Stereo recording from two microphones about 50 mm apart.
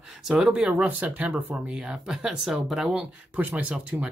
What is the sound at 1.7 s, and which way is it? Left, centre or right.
Speech, centre.